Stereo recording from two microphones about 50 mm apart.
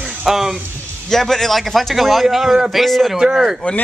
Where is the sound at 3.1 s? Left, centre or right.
Centre.